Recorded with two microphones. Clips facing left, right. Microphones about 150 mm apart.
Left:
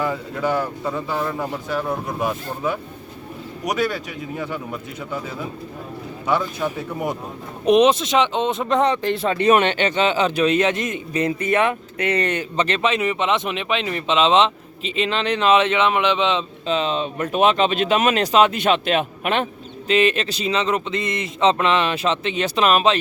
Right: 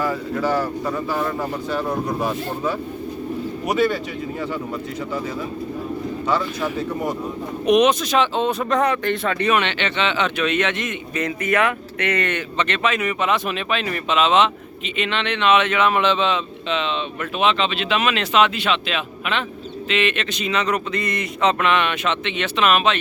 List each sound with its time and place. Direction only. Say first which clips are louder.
0.9 s speech: right 1 dB; 20° left (ahead or behind)
1.2 s a man's voice: right 1 dB; 5° left (ahead or behind)
3.7 s a man's voice: right 2 dB; 5° left (ahead or behind)
6.2 s speech: left 2 dB; 15° left (ahead or behind)
7.6 s speech: left 1 dB; 30° left (ahead or behind)
9.6 s a man's voice: left 4 dB; 45° left (ahead or behind); by 16.4 s 15° left (ahead or behind)
16.6 s speech: left 3 dB; 40° left (ahead or behind)
19.9 s a man's voice: left 4 dB; 35° left (ahead or behind)